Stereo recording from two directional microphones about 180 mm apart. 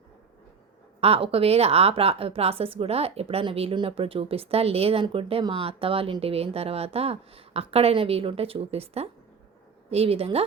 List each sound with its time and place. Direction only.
1.0 s speech: 35° right (ahead or behind)